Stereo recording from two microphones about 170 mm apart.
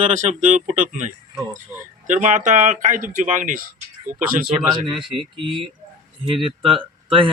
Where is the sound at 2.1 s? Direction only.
45° right (ahead or behind).